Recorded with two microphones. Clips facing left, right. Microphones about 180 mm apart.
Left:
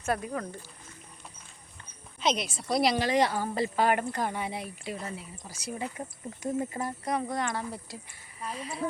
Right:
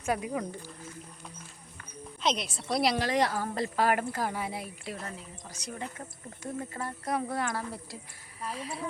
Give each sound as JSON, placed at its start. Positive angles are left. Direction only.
{"t": 0.0, "sound": "speech", "side_deg": -10}
{"t": 2.2, "sound": "a woman's voice", "side_deg": 0}
{"t": 7.0, "sound": "a woman's voice", "side_deg": 0}